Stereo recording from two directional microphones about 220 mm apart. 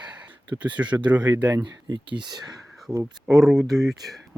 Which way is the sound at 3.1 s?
Centre (ahead or behind).